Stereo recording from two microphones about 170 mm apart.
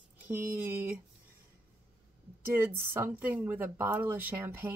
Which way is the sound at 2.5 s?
10° right (ahead or behind).